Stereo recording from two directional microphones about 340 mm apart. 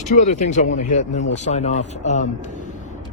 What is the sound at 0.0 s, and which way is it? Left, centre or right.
Speech, left.